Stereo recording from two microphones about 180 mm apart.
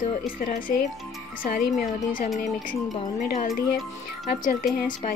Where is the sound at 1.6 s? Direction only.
55° left (ahead or behind).